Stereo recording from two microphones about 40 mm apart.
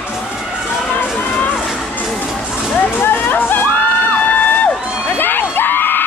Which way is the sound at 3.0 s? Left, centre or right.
Left.